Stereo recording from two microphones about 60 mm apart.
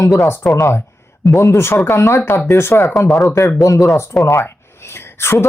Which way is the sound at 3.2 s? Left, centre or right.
Left.